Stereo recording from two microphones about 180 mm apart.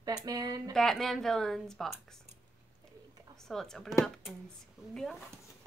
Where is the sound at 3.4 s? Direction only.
Centre (ahead or behind).